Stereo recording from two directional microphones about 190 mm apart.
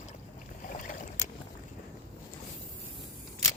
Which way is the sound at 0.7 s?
45° left (ahead or behind).